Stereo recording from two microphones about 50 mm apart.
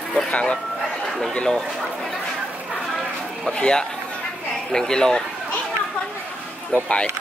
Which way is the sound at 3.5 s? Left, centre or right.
Centre.